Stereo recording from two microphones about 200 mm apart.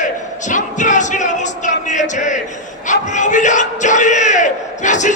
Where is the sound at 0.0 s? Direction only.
40° left (ahead or behind).